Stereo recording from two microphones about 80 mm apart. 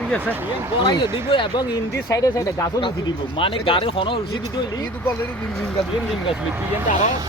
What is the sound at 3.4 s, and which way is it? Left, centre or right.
Speech, left.